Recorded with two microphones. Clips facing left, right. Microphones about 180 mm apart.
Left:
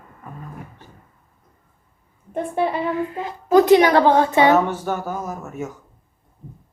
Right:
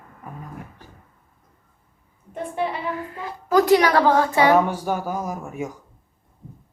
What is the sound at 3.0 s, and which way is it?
A woman's voice, 20° left (ahead or behind).